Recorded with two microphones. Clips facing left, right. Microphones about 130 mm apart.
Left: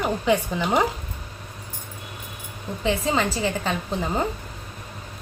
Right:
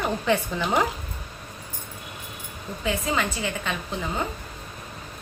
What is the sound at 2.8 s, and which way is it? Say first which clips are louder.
Speech: left 3 dB; 30° left (ahead or behind).